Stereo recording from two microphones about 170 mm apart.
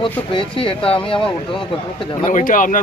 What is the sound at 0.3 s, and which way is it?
Speech, 30° left (ahead or behind).